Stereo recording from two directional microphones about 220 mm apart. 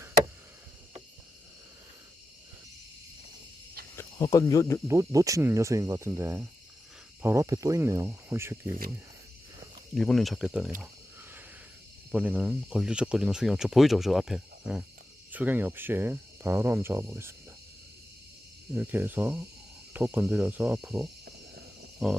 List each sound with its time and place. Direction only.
3.9 s speech: 15° left (ahead or behind)
4.9 s speech: 15° right (ahead or behind)
9.9 s speech: centre (ahead or behind)
12.1 s speech: 5° right (ahead or behind)
18.7 s speech: 10° right (ahead or behind)
21.2 s a sound: 45° right (ahead or behind)